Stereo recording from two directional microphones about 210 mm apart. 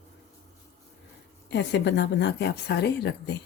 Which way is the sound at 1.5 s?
55° left (ahead or behind).